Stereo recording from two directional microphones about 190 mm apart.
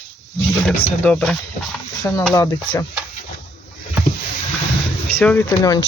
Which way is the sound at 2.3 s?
15° left (ahead or behind).